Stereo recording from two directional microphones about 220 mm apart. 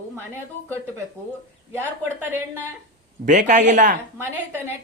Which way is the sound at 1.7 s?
10° right (ahead or behind).